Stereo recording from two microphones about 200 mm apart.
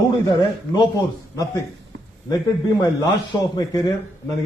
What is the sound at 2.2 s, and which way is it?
A man's voice, 20° left (ahead or behind).